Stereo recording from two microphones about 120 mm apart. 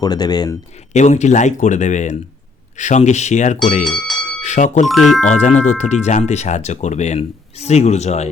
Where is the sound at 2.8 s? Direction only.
75° left (ahead or behind).